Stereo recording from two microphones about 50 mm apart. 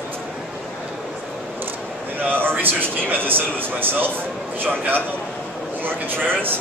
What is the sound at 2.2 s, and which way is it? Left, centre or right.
A man's voice, right.